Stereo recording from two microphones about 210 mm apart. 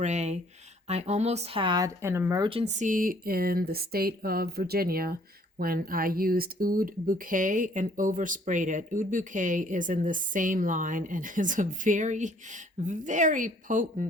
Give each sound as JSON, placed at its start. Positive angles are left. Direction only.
{"t": 0.0, "sound": "speech", "side_deg": -35}
{"t": 2.5, "sound": "speech", "side_deg": -30}